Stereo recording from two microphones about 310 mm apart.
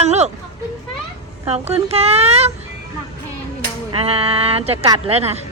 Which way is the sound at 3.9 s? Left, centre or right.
Centre.